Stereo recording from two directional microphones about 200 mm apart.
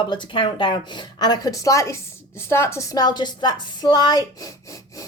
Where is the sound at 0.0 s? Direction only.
25° left (ahead or behind).